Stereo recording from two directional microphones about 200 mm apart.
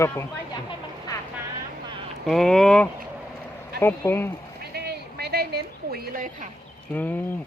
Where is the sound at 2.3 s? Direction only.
Centre (ahead or behind).